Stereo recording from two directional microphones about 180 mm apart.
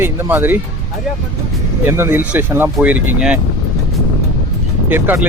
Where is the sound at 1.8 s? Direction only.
15° right (ahead or behind).